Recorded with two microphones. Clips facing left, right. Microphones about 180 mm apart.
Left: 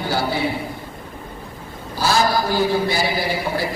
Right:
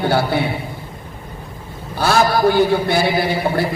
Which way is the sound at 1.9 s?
60° right (ahead or behind).